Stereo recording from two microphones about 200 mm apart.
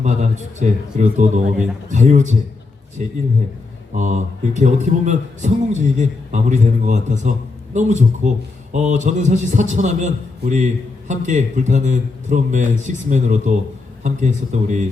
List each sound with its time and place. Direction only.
0.0 s a man's voice: 35° right (ahead or behind)
3.9 s a man's voice: 35° right (ahead or behind)